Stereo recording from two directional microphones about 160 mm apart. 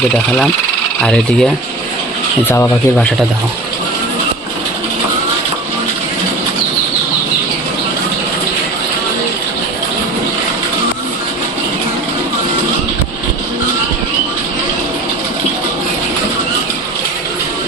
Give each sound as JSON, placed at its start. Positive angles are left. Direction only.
{"t": 1.0, "sound": "speech", "side_deg": 5}
{"t": 2.5, "sound": "speech", "side_deg": 15}